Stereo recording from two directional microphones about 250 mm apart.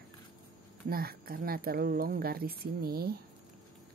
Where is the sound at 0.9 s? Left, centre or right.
Right.